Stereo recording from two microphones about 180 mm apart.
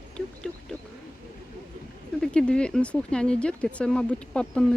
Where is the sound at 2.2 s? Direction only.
5° left (ahead or behind).